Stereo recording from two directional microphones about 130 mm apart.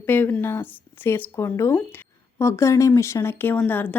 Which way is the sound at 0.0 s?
15° left (ahead or behind).